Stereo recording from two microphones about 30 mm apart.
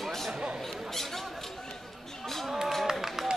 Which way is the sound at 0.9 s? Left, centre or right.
Centre.